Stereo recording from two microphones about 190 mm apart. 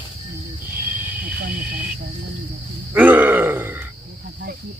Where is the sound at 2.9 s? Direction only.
10° right (ahead or behind).